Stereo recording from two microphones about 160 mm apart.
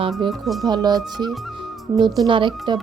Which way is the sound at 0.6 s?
25° right (ahead or behind).